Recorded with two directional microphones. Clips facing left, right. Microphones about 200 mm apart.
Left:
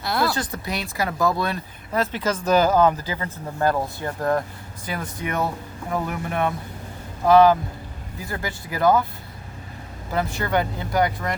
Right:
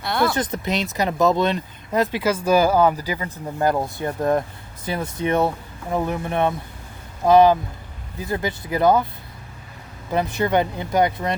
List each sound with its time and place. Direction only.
0.0 s speech: centre (ahead or behind)
0.3 s speech: 20° right (ahead or behind)
10.1 s speech: 20° right (ahead or behind)